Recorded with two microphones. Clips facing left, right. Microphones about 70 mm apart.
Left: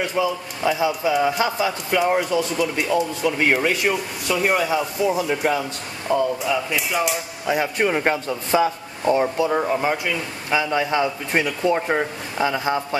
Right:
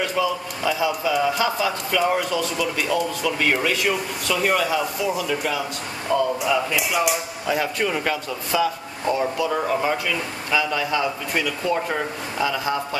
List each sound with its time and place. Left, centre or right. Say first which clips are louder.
0.1 s a man's voice: left 1 dB; left
5.1 s speech: left 3 dB; left
6.1 s a man's voice: left 1 dB; left
6.4 s speech: right 1 dB; centre
7.4 s a man's voice: left 3 dB; left